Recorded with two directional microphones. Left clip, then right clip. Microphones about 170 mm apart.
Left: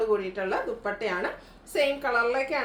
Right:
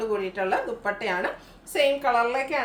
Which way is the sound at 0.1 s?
20° right (ahead or behind).